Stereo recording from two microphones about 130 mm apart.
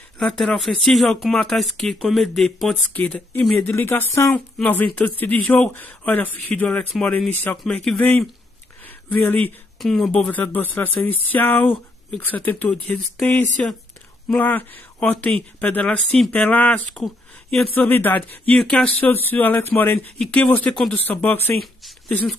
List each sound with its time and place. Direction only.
0.2 s speech: 5° left (ahead or behind)
3.6 s speech: 15° left (ahead or behind)
8.8 s a sound: 15° left (ahead or behind)
9.8 s speech: centre (ahead or behind)
17.0 s a sound: centre (ahead or behind)
17.7 s speech: 15° left (ahead or behind)